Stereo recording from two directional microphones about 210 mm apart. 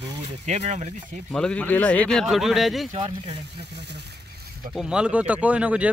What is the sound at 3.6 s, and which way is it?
Speech, 55° right (ahead or behind).